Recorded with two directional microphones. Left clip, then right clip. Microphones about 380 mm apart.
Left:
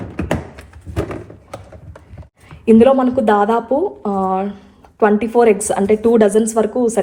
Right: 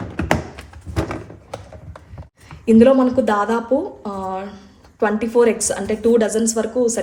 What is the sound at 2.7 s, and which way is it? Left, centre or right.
A woman's voice, centre.